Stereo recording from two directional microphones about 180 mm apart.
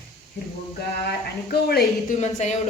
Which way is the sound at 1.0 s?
60° left (ahead or behind).